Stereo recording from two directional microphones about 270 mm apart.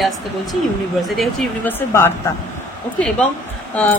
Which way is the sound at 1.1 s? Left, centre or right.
Centre.